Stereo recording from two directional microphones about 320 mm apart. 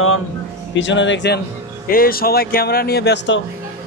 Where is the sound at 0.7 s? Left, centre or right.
Left.